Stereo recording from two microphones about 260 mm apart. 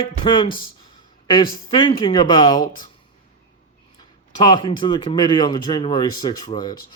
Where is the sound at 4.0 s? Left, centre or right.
Centre.